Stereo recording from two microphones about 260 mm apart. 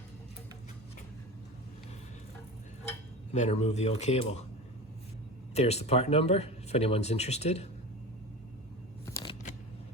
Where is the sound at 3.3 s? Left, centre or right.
Left.